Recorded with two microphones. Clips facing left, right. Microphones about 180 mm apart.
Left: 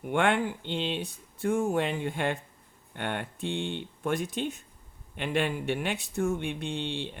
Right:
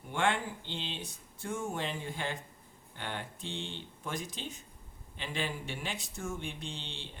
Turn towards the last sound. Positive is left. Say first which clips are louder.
# left 11 dB
turn(degrees=60)  # may be behind; listen again after turning